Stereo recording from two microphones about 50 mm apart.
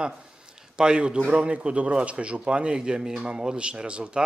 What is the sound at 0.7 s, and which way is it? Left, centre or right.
A man's voice, centre.